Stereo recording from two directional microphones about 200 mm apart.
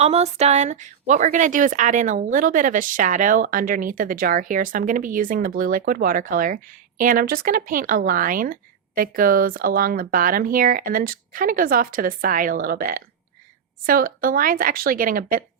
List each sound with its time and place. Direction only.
0.0 s a woman's voice: 30° right (ahead or behind)